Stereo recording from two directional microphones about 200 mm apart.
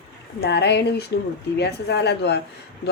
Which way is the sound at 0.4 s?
55° left (ahead or behind).